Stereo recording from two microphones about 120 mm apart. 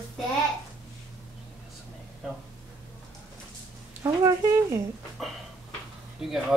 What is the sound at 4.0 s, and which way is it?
Speech, 30° right (ahead or behind).